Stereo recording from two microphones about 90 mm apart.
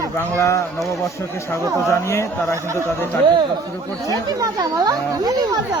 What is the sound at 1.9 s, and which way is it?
Speech, 30° left (ahead or behind).